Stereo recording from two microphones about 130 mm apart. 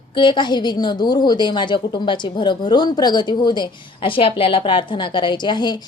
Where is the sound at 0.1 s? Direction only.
40° left (ahead or behind).